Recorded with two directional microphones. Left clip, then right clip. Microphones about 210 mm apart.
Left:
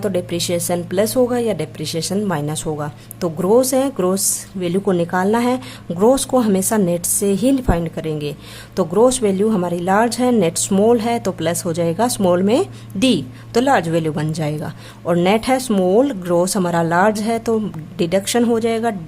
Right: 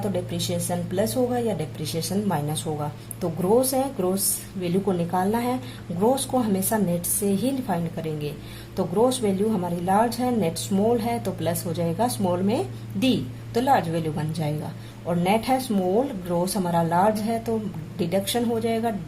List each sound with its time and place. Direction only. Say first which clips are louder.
0.0 s speech: left 8 dB; 40° left (ahead or behind)